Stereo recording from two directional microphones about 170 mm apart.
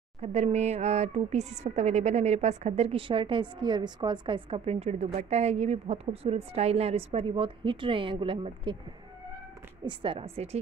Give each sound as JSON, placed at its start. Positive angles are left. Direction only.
{"t": 0.2, "sound": "a woman's voice", "side_deg": -40}
{"t": 9.8, "sound": "a woman's voice", "side_deg": -30}